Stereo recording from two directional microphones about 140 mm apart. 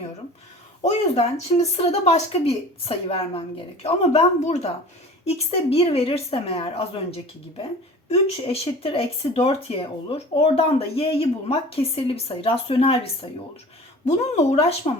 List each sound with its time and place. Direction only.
0.8 s speech: 50° left (ahead or behind)